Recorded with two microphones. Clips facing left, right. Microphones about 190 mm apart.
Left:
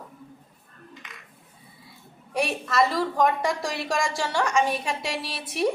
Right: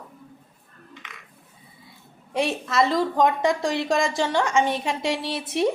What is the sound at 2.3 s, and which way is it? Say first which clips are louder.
A woman's voice: right 2 dB; 25° right (ahead or behind).